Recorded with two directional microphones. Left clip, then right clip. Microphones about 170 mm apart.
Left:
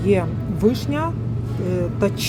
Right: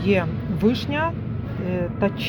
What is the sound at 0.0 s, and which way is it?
A man's voice, 15° left (ahead or behind).